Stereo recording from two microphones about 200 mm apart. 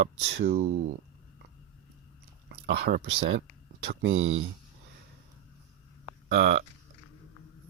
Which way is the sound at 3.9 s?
65° right (ahead or behind).